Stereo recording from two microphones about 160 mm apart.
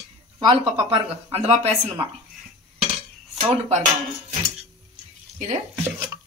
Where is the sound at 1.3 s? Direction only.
40° right (ahead or behind).